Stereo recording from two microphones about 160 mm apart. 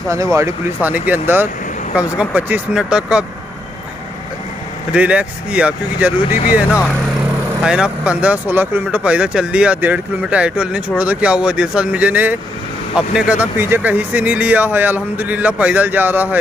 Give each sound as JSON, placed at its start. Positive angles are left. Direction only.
{"t": 0.1, "sound": "speech", "side_deg": -20}
{"t": 4.9, "sound": "speech", "side_deg": -5}
{"t": 6.3, "sound": "speech", "side_deg": 60}
{"t": 7.6, "sound": "speech", "side_deg": -5}